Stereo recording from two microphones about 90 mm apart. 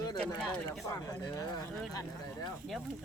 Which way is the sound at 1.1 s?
45° left (ahead or behind).